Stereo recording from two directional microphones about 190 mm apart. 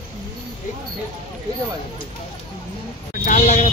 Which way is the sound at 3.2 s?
35° left (ahead or behind).